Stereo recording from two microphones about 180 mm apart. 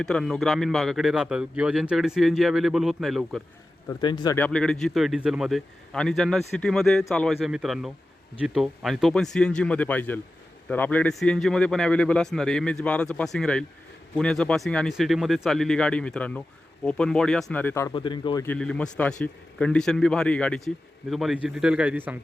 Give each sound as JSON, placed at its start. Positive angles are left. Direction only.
{"t": 0.0, "sound": "a man's voice", "side_deg": 5}
{"t": 3.8, "sound": "speech", "side_deg": 25}
{"t": 4.4, "sound": "a man's voice", "side_deg": 5}
{"t": 17.9, "sound": "speech", "side_deg": 25}
{"t": 18.4, "sound": "a man's voice", "side_deg": 5}